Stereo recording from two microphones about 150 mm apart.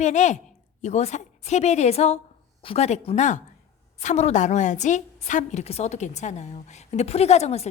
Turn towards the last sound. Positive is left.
turn(degrees=45)  # may be behind; listen again after turning